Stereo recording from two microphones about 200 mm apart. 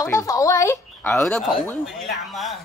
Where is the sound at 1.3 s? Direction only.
Centre (ahead or behind).